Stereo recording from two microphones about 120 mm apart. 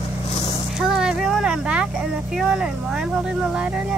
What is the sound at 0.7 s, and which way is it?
Speech, 5° right (ahead or behind).